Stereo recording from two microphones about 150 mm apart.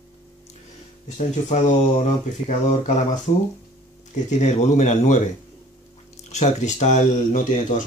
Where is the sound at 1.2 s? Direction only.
50° left (ahead or behind).